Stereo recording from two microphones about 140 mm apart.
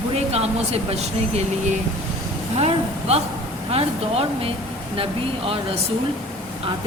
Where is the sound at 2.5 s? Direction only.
50° right (ahead or behind).